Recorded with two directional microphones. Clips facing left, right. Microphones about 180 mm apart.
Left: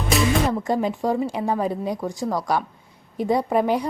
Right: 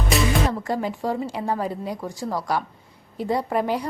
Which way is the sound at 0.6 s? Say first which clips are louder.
Left 3 dB; 20° left (ahead or behind).